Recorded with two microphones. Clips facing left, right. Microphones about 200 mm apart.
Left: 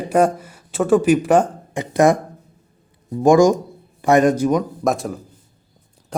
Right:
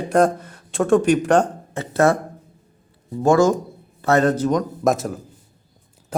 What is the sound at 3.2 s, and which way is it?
A man's voice, 15° left (ahead or behind).